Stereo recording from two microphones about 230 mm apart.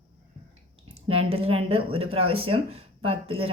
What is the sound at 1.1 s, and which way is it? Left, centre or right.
A woman's voice, right.